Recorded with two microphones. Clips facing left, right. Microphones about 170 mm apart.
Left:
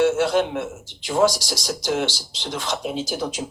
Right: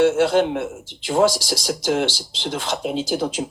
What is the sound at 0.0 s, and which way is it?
Speech, 30° right (ahead or behind).